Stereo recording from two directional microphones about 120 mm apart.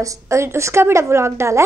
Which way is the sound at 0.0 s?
25° right (ahead or behind).